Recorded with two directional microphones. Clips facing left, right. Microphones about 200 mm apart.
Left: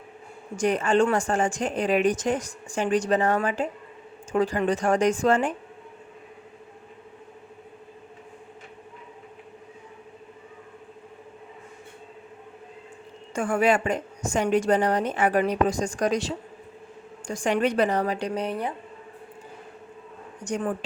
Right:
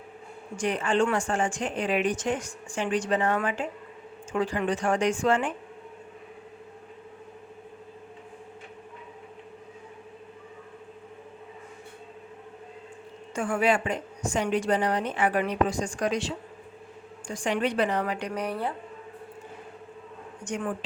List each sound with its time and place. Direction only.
0.5 s a woman's voice: 45° left (ahead or behind)
13.3 s a woman's voice: 45° left (ahead or behind); by 18.7 s 20° left (ahead or behind)
20.4 s a woman's voice: 40° left (ahead or behind)